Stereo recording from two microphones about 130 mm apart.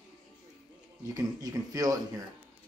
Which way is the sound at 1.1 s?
30° right (ahead or behind).